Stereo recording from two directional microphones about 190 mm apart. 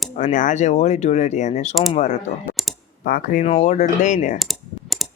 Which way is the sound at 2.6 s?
Centre (ahead or behind).